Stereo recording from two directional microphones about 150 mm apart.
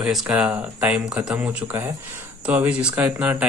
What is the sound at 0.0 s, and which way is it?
Speech, 5° right (ahead or behind).